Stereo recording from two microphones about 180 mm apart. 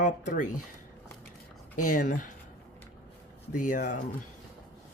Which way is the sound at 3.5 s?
45° left (ahead or behind).